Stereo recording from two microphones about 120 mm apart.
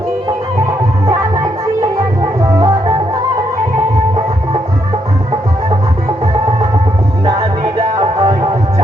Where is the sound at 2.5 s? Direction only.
30° right (ahead or behind).